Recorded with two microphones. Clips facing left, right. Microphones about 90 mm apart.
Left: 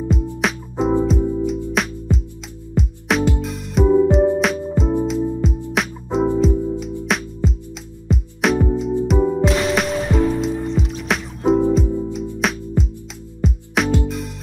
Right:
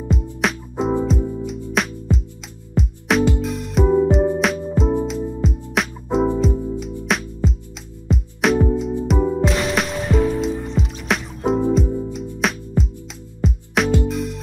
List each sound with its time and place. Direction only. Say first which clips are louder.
0.1 s music: right 2 dB; centre (ahead or behind)